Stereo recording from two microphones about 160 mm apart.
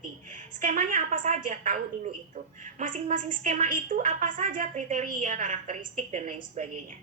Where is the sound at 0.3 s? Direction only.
55° right (ahead or behind).